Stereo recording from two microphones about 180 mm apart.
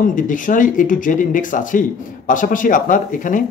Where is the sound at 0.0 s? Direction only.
45° left (ahead or behind).